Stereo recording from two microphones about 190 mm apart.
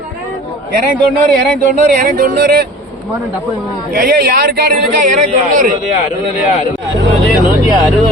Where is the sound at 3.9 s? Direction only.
50° right (ahead or behind).